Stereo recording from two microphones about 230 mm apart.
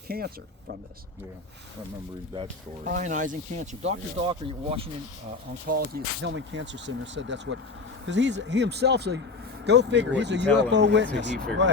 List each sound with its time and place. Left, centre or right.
0.1 s speech: right
2.8 s speech: right
5.6 s speech: right